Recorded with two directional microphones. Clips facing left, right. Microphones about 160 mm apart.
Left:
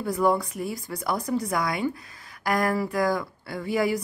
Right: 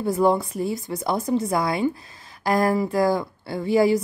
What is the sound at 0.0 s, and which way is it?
Speech, 25° right (ahead or behind).